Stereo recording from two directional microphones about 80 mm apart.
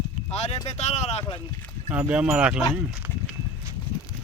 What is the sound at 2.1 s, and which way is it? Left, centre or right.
Speech, centre.